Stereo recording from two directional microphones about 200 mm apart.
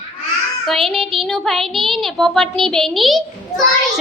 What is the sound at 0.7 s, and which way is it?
A woman's voice, centre (ahead or behind).